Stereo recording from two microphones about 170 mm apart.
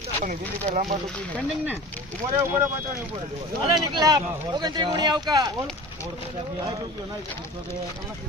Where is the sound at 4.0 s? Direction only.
20° right (ahead or behind).